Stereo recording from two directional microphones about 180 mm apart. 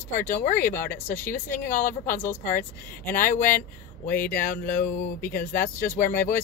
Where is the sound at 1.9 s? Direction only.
10° left (ahead or behind).